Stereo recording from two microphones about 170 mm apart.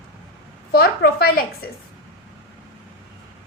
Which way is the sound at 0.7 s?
65° left (ahead or behind).